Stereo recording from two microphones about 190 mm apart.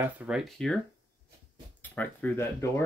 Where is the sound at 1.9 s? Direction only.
10° left (ahead or behind).